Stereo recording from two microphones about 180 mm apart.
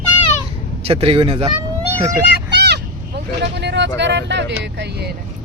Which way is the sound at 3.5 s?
70° right (ahead or behind).